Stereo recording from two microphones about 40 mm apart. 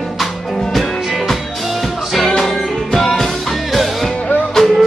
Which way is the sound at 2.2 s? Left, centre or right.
Centre.